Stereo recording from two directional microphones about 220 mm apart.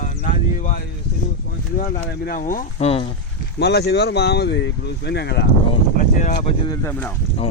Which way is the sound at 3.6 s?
50° left (ahead or behind).